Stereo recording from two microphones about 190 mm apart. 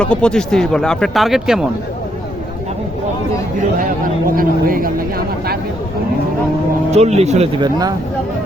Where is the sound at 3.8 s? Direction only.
45° right (ahead or behind).